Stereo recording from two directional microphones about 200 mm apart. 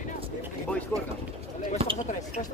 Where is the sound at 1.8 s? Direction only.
30° right (ahead or behind).